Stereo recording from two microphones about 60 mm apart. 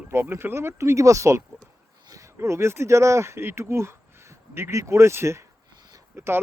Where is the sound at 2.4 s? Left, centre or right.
Right.